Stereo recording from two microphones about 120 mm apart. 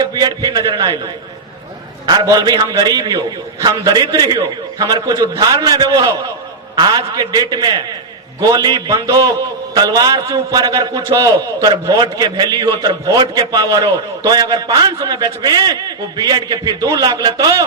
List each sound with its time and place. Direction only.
0.0 s a man's voice: 35° right (ahead or behind)